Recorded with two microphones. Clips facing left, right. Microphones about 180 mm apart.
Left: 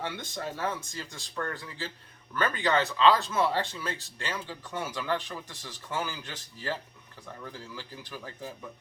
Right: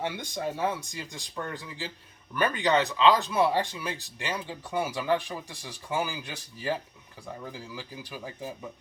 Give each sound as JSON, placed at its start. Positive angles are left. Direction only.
{"t": 0.0, "sound": "speech", "side_deg": -15}